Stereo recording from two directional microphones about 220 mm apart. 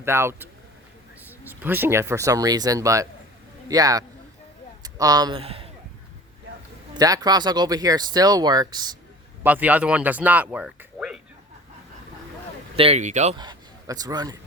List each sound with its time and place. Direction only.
0.0 s speech: 10° right (ahead or behind)
1.5 s speech: 10° right (ahead or behind); by 5.7 s 25° right (ahead or behind)
7.0 s speech: 15° right (ahead or behind)
9.4 s speech: 5° right (ahead or behind)
12.7 s speech: 25° right (ahead or behind)